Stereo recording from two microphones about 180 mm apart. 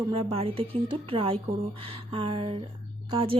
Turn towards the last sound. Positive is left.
turn(degrees=-30)  # may be behind; listen again after turning